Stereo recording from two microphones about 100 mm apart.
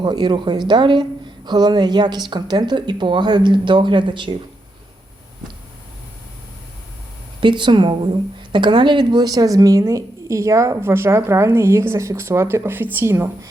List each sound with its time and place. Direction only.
0.0 s speech: 45° right (ahead or behind)
7.4 s a woman's voice: 50° right (ahead or behind); by 13.5 s 25° right (ahead or behind)